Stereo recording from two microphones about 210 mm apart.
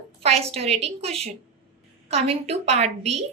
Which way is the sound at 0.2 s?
30° right (ahead or behind).